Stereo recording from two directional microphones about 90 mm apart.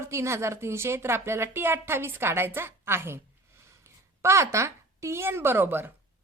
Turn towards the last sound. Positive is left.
turn(degrees=-20)  # may be behind; listen again after turning